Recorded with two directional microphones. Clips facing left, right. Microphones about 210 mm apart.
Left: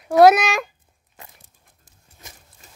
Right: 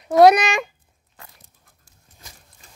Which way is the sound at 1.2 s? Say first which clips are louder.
Left 2 dB; 20° left (ahead or behind).